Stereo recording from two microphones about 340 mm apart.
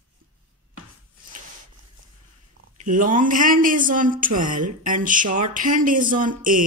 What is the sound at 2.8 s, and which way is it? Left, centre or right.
Speech, right.